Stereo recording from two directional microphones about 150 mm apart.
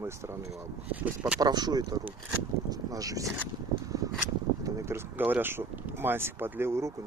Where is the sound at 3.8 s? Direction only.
25° right (ahead or behind).